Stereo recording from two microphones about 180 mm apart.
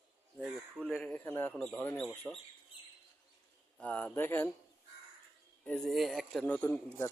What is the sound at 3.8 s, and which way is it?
Speech, 10° left (ahead or behind).